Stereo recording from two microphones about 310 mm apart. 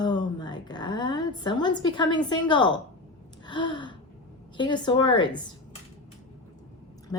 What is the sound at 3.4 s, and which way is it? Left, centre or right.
Gasp, centre.